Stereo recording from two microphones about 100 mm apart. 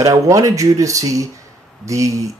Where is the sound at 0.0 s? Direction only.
30° right (ahead or behind).